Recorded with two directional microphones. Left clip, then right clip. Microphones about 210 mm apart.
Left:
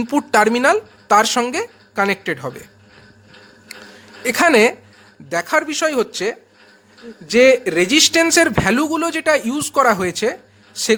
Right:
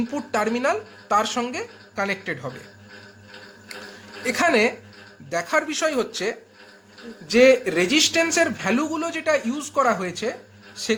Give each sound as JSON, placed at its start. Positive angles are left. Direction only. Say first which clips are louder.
{"t": 0.1, "sound": "a man's voice", "louder": "left 12 dB", "side_deg": 50}
{"t": 4.2, "sound": "a man's voice", "louder": "left 6 dB", "side_deg": 50}